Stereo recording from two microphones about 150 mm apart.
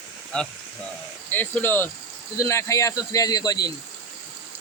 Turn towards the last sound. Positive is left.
turn(degrees=25)  # may be behind; listen again after turning